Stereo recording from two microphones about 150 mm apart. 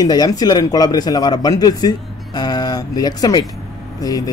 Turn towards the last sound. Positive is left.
turn(degrees=25)  # may be behind; listen again after turning